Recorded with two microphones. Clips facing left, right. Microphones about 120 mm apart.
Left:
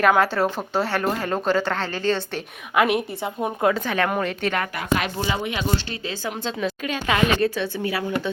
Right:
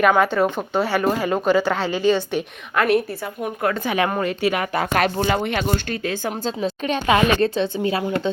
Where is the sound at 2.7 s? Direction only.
15° left (ahead or behind).